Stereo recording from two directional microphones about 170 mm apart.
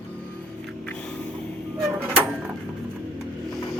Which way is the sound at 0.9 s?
5° left (ahead or behind).